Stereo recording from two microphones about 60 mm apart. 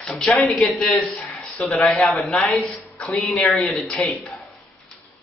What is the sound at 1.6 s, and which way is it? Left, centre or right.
Speech, centre.